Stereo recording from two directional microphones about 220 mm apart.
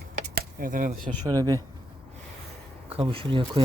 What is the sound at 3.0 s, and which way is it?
Speech, 25° right (ahead or behind).